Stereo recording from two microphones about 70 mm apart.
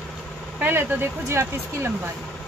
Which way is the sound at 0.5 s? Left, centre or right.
Right.